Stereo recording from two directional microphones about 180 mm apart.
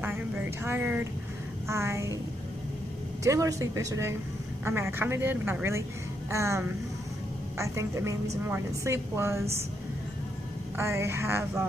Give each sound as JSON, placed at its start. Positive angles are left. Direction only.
{"t": 0.0, "sound": "a woman's voice", "side_deg": -10}
{"t": 3.3, "sound": "a woman's voice", "side_deg": -20}
{"t": 10.8, "sound": "a woman's voice", "side_deg": -15}